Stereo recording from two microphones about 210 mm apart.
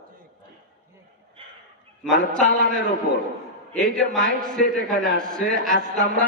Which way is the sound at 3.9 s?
5° left (ahead or behind).